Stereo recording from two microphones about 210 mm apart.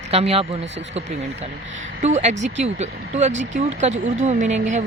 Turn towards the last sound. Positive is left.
turn(degrees=-35)  # may be behind; listen again after turning